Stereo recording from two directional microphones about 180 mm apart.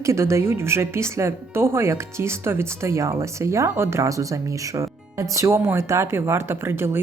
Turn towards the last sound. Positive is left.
turn(degrees=-15)  # may be behind; listen again after turning